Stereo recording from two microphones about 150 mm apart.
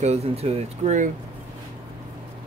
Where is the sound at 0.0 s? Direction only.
45° right (ahead or behind).